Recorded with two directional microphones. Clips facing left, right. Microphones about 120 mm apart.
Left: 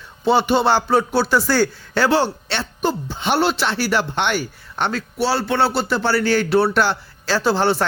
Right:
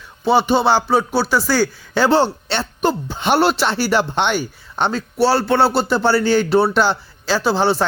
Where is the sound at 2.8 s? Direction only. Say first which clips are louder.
Right 2 dB; 65° right (ahead or behind).